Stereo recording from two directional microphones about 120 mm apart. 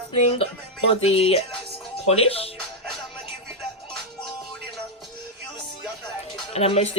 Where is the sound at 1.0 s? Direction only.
55° left (ahead or behind).